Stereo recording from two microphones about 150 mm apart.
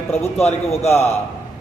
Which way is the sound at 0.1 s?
45° left (ahead or behind).